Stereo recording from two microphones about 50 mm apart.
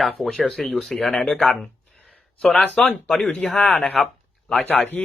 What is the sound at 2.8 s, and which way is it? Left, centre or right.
Speech, centre.